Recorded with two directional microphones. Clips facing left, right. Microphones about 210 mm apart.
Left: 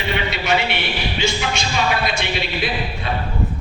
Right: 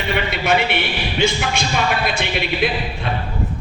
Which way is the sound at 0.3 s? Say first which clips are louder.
Right 3 dB; 55° right (ahead or behind).